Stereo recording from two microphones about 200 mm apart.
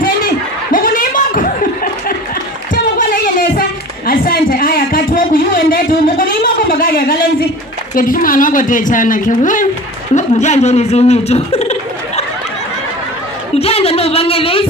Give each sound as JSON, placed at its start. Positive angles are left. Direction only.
{"t": 0.8, "sound": "chuckle", "side_deg": 45}
{"t": 2.7, "sound": "a sound", "side_deg": 45}
{"t": 7.9, "sound": "speech", "side_deg": 45}
{"t": 13.6, "sound": "a woman's voice", "side_deg": 30}